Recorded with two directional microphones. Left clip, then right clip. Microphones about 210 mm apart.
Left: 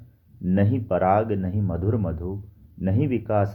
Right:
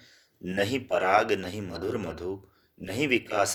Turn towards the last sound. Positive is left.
turn(degrees=-25)  # may be behind; listen again after turning